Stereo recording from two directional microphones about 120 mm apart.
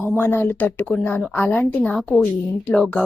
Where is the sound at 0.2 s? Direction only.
15° left (ahead or behind).